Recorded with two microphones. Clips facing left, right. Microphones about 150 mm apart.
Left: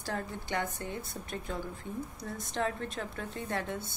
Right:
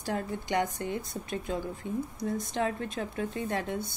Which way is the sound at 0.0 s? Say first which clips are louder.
Right 4 dB; 15° right (ahead or behind).